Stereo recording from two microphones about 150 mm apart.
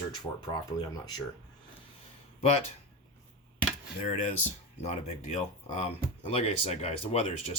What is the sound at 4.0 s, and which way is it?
Speech, 55° left (ahead or behind).